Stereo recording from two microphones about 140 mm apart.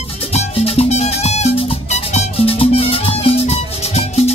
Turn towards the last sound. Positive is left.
turn(degrees=50)  # may be behind; listen again after turning